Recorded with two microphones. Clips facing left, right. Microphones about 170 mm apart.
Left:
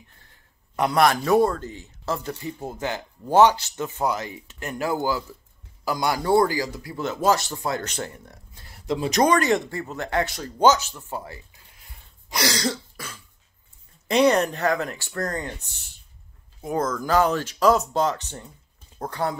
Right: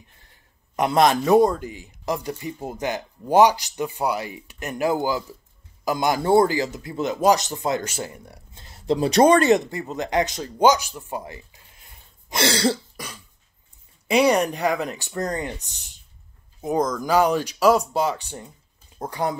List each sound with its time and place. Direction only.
0.7 s a man's voice: 20° right (ahead or behind)
7.8 s a man's voice: 10° right (ahead or behind)
8.5 s a sound: 25° right (ahead or behind)
8.9 s a man's voice: 35° right (ahead or behind); by 11.4 s 15° right (ahead or behind)
12.3 s speech: 25° right (ahead or behind)
12.9 s cough: 15° right (ahead or behind)
14.0 s a man's voice: 10° right (ahead or behind)